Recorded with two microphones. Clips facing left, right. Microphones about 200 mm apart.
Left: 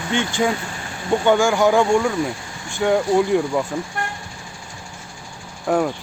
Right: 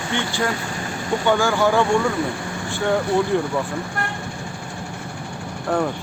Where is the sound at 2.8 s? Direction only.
15° left (ahead or behind).